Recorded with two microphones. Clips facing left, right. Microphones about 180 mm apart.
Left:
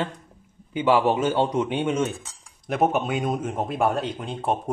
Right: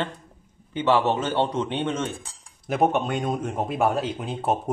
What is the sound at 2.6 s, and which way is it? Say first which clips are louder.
A man's voice: even; centre (ahead or behind).